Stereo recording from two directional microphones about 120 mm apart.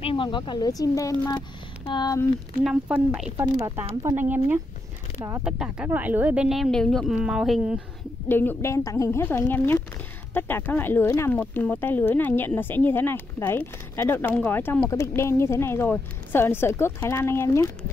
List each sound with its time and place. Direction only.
0.0 s speech: 45° left (ahead or behind)
2.6 s speech: 10° right (ahead or behind)
3.6 s a woman's voice: 25° right (ahead or behind); by 7.2 s 5° left (ahead or behind)
7.2 s speech: 5° right (ahead or behind)
8.3 s a woman's voice: 15° left (ahead or behind)